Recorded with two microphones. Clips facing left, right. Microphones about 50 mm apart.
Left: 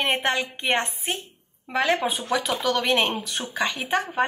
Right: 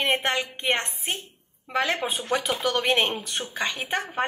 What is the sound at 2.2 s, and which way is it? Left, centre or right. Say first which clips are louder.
Speech: left 1 dB; right.